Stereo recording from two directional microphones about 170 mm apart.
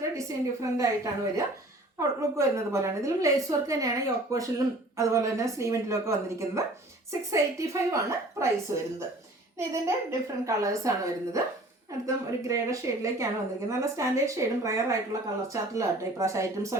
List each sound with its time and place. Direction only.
0.0 s a woman's voice: 20° right (ahead or behind)